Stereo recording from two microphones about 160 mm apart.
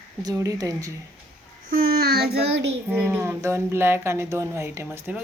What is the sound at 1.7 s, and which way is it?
Child singing, 70° right (ahead or behind).